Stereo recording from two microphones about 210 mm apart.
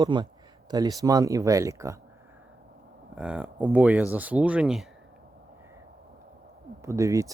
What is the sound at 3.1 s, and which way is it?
Speech, 5° right (ahead or behind).